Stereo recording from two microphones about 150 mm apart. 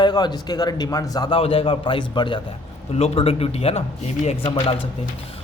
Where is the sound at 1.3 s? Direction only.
40° left (ahead or behind).